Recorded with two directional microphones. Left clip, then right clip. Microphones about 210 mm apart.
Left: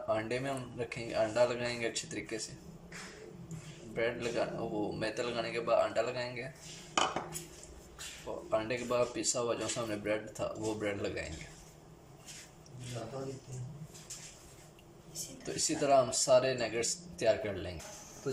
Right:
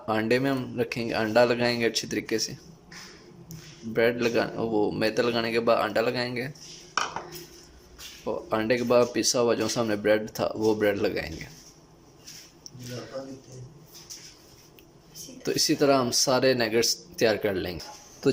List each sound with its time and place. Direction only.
0.1 s speech: 45° right (ahead or behind)
3.9 s speech: 45° right (ahead or behind)
8.4 s speech: 40° right (ahead or behind)
15.6 s speech: 40° right (ahead or behind)